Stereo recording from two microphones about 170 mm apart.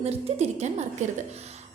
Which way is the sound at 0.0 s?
40° right (ahead or behind).